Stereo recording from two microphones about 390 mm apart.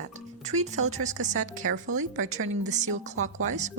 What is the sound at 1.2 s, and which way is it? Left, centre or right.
A woman's voice, centre.